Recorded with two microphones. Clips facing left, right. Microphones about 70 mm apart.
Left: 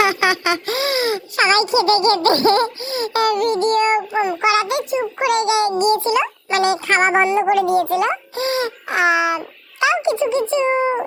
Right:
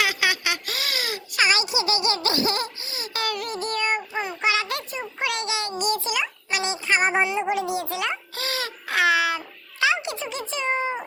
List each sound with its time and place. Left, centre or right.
0.0 s a child's voice: left
4.1 s a sound: centre
4.4 s a child's voice: left
6.5 s speech: left
7.2 s speech: left
8.1 s a child's voice: left